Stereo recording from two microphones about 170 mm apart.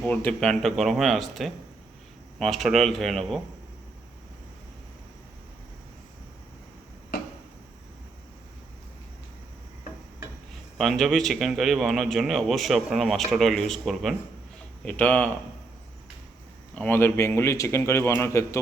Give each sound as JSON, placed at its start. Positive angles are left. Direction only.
{"t": 0.0, "sound": "a man's voice", "side_deg": 10}
{"t": 10.8, "sound": "a man's voice", "side_deg": 0}
{"t": 16.7, "sound": "a man's voice", "side_deg": 10}